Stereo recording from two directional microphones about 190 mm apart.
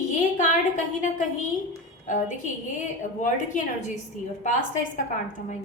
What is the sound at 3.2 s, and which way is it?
Speech, 45° left (ahead or behind).